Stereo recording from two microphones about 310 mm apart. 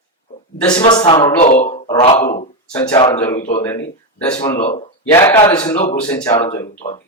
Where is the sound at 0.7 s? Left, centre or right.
Centre.